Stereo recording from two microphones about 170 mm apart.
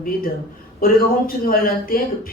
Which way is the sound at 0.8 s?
60° left (ahead or behind).